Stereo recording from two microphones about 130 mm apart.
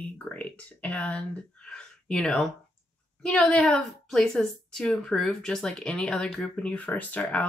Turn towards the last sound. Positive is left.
turn(degrees=10)  # may be behind; listen again after turning